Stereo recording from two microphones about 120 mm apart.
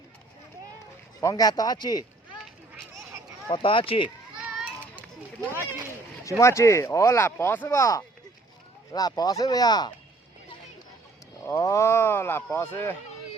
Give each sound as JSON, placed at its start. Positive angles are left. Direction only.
{"t": 1.2, "sound": "speech", "side_deg": 30}
{"t": 3.5, "sound": "speech", "side_deg": 45}
{"t": 4.4, "sound": "children playing", "side_deg": -10}
{"t": 6.4, "sound": "speech", "side_deg": 25}
{"t": 11.4, "sound": "speech", "side_deg": 25}